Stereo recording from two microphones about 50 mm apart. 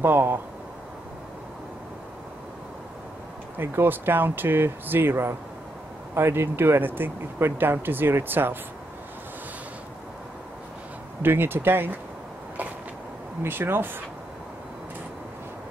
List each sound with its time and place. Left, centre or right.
0.0 s speech: right
3.5 s speech: right
6.1 s speech: right
11.2 s speech: right
13.4 s speech: right